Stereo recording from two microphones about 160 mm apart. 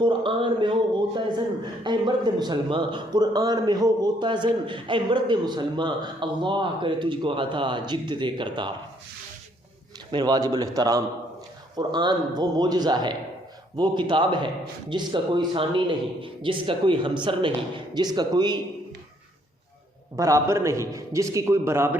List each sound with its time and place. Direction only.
0.0 s a sound: 30° right (ahead or behind)
1.8 s a man's voice: 30° right (ahead or behind)
10.1 s a man's voice: 30° right (ahead or behind)
20.1 s a man's voice: 20° right (ahead or behind)